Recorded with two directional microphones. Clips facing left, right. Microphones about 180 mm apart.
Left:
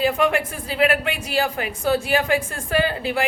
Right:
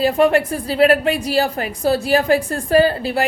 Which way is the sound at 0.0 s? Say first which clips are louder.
Right 5 dB; 35° right (ahead or behind).